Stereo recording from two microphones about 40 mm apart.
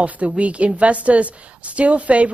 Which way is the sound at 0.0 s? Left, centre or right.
Right.